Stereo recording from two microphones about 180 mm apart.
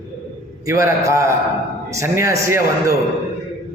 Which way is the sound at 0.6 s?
15° right (ahead or behind).